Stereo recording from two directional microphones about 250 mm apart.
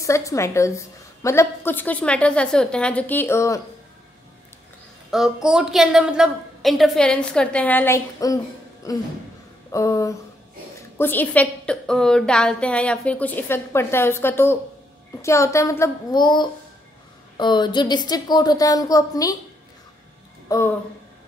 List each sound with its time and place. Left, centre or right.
0.0 s a woman's voice: centre
5.1 s a woman's voice: centre
9.7 s a woman's voice: centre
20.4 s speech: centre